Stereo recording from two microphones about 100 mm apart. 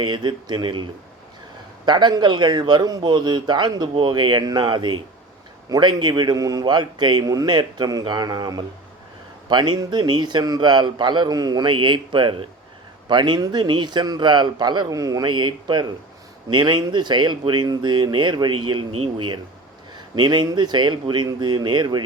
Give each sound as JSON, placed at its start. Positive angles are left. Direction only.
{"t": 0.0, "sound": "a man's voice", "side_deg": -50}
{"t": 13.1, "sound": "a man's voice", "side_deg": -50}
{"t": 15.2, "sound": "a man's voice", "side_deg": -50}
{"t": 20.1, "sound": "a man's voice", "side_deg": -45}